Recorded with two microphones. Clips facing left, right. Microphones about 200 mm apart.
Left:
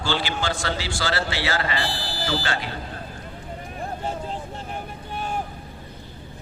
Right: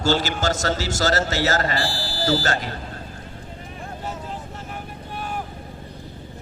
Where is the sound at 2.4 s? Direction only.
40° right (ahead or behind).